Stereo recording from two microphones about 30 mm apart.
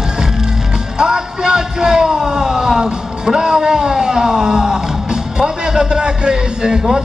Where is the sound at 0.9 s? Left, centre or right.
Right.